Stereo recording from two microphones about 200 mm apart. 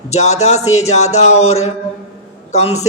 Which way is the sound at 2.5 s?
35° left (ahead or behind).